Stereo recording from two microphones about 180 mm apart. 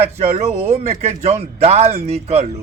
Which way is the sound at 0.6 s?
35° right (ahead or behind).